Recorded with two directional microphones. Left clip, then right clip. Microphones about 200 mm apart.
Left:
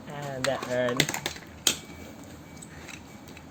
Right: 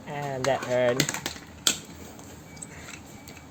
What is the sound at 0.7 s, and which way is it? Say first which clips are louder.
Speech: right 5 dB; 25° right (ahead or behind).